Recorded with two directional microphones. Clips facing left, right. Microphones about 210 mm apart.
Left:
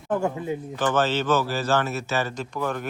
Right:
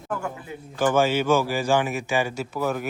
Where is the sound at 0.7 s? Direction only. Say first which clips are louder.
Right 3 dB; 10° right (ahead or behind).